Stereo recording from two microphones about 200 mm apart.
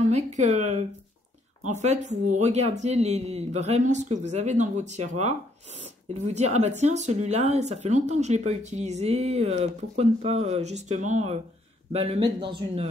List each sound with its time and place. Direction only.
0.1 s speech: 35° right (ahead or behind)